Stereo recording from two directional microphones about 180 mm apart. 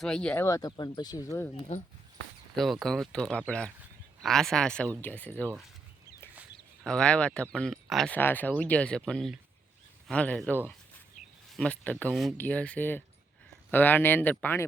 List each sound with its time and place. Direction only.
0.0 s speech: 5° left (ahead or behind)
0.4 s speech: 20° left (ahead or behind)
1.7 s speech: 40° left (ahead or behind)
2.6 s speech: centre (ahead or behind)
6.8 s speech: 5° left (ahead or behind)